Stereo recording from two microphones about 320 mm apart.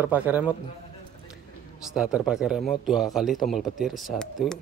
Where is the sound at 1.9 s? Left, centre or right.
Centre.